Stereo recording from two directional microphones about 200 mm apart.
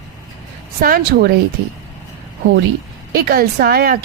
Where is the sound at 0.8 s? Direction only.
45° right (ahead or behind).